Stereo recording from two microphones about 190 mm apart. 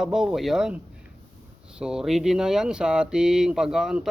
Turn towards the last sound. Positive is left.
turn(degrees=0)  # may be behind; listen again after turning